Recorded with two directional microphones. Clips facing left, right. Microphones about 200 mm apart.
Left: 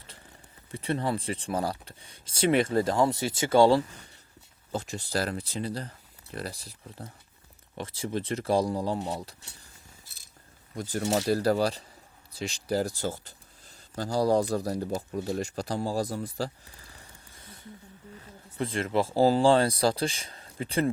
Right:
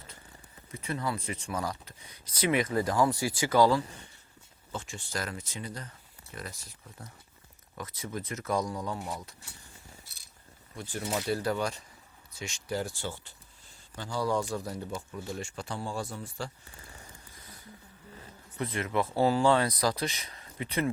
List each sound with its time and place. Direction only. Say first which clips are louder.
0.7 s speech: left 5 dB; 30° left (ahead or behind)
10.8 s speech: left 6 dB; 40° left (ahead or behind)
17.4 s a sound: left 6 dB; 25° left (ahead or behind)
18.5 s speech: left 3 dB; 30° left (ahead or behind)